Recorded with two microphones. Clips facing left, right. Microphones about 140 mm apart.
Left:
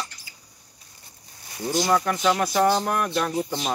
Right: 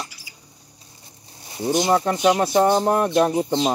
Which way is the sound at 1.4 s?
25° right (ahead or behind).